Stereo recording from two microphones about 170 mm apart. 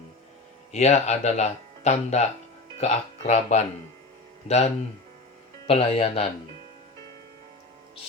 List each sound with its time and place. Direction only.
0.7 s speech: 40° left (ahead or behind)